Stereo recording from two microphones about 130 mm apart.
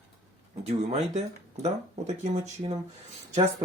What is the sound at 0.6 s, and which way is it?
Speech, 50° right (ahead or behind).